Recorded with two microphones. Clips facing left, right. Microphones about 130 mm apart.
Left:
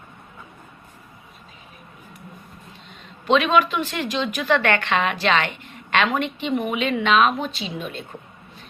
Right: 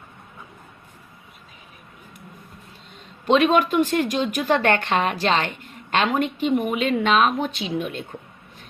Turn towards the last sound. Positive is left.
turn(degrees=-55)  # may be behind; listen again after turning